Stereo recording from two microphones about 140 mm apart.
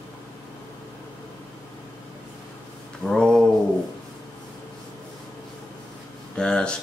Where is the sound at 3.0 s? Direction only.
5° left (ahead or behind).